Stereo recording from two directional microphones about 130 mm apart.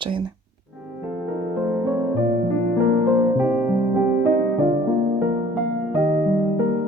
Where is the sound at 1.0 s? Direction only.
15° right (ahead or behind).